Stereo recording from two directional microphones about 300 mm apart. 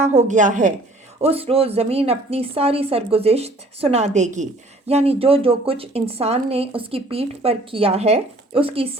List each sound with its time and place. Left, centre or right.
0.0 s a woman's voice: right